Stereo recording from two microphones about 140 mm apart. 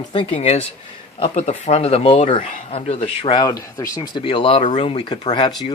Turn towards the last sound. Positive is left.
turn(degrees=35)  # may be behind; listen again after turning